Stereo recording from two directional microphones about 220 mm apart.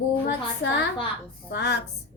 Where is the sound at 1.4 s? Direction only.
50° left (ahead or behind).